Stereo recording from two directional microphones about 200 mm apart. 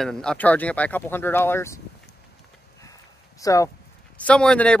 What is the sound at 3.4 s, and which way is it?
Speech, 15° left (ahead or behind).